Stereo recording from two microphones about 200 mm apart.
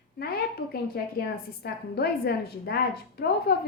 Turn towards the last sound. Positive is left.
turn(degrees=55)  # may be behind; listen again after turning